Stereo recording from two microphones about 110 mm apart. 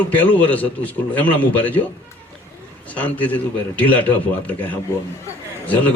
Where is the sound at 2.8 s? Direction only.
15° left (ahead or behind).